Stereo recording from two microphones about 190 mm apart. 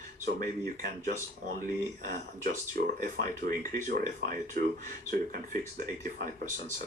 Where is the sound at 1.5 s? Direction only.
45° right (ahead or behind).